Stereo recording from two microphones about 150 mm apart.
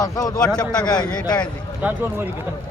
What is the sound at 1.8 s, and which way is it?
Speech, 10° right (ahead or behind).